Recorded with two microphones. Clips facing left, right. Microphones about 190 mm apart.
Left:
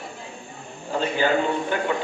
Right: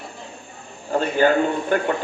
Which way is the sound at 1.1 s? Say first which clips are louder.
Right 4 dB; 50° right (ahead or behind).